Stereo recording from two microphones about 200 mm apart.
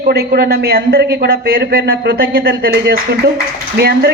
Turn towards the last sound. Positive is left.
turn(degrees=-55)  # may be behind; listen again after turning